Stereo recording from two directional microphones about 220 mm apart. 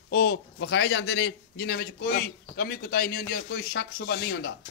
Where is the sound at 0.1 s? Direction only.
50° left (ahead or behind).